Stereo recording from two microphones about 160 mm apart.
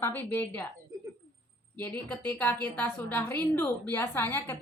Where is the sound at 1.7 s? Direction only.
10° left (ahead or behind).